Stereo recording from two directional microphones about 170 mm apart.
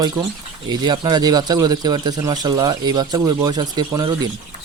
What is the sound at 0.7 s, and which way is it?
Speech, 25° right (ahead or behind).